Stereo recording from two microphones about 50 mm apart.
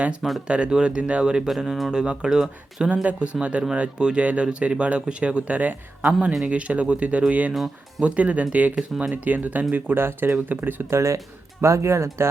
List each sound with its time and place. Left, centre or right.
0.2 s speech: centre
0.4 s speech: right
1.5 s speech: centre
1.9 s speech: centre
2.9 s speech: right
7.5 s speech: centre
8.0 s speech: right
8.7 s speech: centre
9.2 s speech: right
10.5 s speech: right
10.8 s speech: right